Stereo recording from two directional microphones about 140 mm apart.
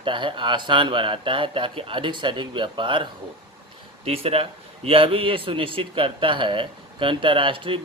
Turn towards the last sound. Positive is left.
turn(degrees=-40)  # may be behind; listen again after turning